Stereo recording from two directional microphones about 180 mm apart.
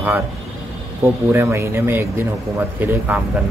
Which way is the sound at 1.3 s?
15° right (ahead or behind).